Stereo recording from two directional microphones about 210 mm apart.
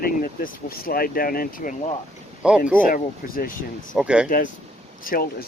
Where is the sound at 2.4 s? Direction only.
5° right (ahead or behind).